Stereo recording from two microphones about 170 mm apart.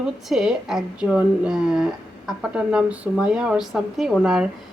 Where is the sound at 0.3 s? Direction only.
5° right (ahead or behind).